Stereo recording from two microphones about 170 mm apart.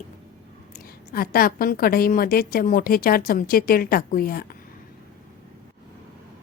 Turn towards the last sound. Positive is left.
turn(degrees=60)  # may be behind; listen again after turning